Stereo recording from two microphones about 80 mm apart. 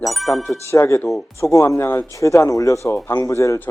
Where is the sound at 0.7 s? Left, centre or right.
Left.